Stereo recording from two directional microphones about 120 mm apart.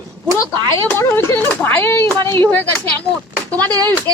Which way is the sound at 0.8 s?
20° left (ahead or behind).